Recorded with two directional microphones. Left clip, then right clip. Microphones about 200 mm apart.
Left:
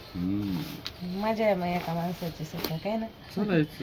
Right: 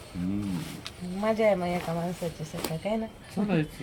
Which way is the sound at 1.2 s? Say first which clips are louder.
Right 2 dB; 10° right (ahead or behind).